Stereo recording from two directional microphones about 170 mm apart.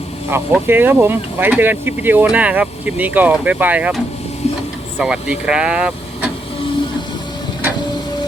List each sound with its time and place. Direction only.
0.3 s speech: 15° right (ahead or behind)
4.4 s vehicle: 40° left (ahead or behind)
4.9 s speech: 5° right (ahead or behind)